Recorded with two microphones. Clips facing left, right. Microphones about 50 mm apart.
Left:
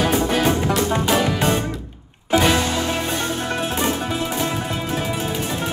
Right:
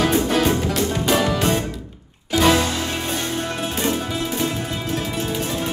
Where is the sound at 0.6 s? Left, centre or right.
Left.